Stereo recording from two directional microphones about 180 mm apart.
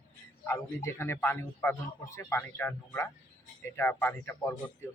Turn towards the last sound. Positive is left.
turn(degrees=10)  # may be behind; listen again after turning